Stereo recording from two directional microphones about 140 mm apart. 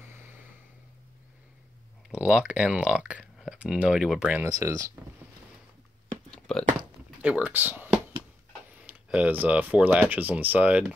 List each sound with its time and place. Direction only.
2.1 s speech: 5° right (ahead or behind)
4.5 s speech: 25° right (ahead or behind)
6.3 s biting: 5° left (ahead or behind)
7.2 s speech: 10° right (ahead or behind)